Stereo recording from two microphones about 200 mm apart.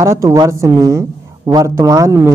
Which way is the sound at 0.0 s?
15° right (ahead or behind).